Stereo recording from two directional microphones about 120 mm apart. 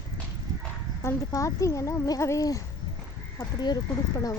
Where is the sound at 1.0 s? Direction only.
25° left (ahead or behind).